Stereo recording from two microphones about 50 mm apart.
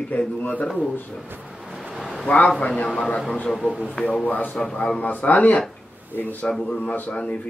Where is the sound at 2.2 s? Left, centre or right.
Left.